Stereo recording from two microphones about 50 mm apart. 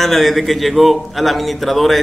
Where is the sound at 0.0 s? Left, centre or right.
Centre.